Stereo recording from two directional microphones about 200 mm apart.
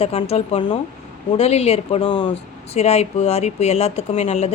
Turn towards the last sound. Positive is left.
turn(degrees=35)  # may be behind; listen again after turning